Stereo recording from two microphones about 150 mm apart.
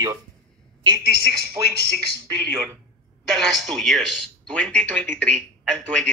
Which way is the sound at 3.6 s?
Centre (ahead or behind).